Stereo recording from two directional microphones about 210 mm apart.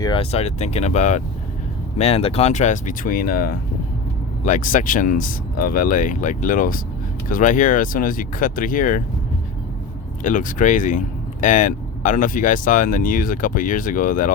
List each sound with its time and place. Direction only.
0.0 s speech: 25° left (ahead or behind)
10.2 s speech: 40° left (ahead or behind)